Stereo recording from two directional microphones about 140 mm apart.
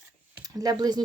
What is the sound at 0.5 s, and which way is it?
Speech, 30° right (ahead or behind).